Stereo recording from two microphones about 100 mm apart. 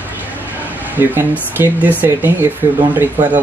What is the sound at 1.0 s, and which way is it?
Speech, 25° right (ahead or behind).